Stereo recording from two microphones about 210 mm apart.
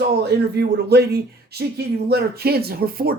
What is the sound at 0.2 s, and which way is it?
Speech, 50° right (ahead or behind).